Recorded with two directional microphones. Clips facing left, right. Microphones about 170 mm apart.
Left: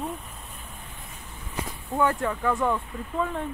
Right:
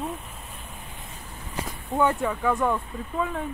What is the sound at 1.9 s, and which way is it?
Speech, 20° right (ahead or behind).